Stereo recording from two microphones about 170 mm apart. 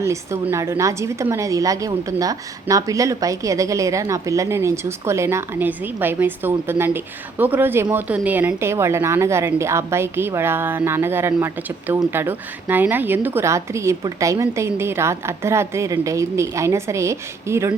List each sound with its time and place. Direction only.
0.0 s a woman's voice: 15° right (ahead or behind)